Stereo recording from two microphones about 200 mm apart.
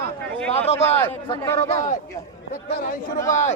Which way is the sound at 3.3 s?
35° left (ahead or behind).